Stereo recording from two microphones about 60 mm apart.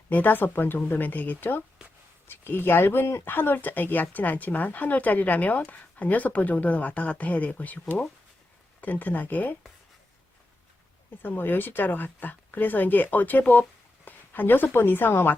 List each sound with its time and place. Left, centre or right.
0.1 s speech: left
3.2 s speech: left
11.2 s speech: left